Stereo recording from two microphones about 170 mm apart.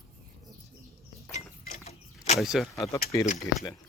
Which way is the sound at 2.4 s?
Centre (ahead or behind).